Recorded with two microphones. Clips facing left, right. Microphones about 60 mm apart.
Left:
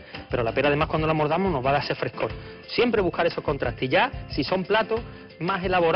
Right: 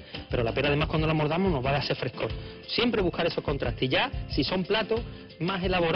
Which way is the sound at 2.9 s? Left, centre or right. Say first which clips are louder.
Left 4 dB; left.